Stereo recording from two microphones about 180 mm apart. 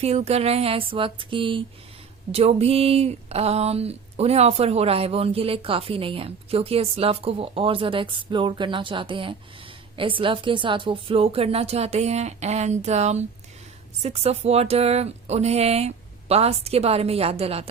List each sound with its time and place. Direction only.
0.0 s speech: 35° right (ahead or behind)